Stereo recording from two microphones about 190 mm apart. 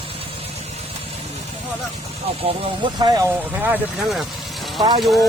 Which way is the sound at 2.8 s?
20° right (ahead or behind).